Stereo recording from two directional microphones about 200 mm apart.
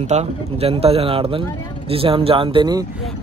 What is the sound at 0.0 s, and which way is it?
Speech, 35° right (ahead or behind).